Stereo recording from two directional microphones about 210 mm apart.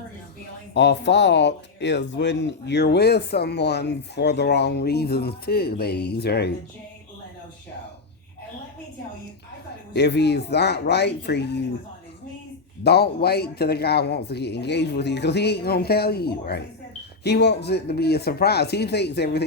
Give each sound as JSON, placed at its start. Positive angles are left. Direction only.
{"t": 0.7, "sound": "speech", "side_deg": 55}
{"t": 9.9, "sound": "speech", "side_deg": 55}
{"t": 12.8, "sound": "speech", "side_deg": 50}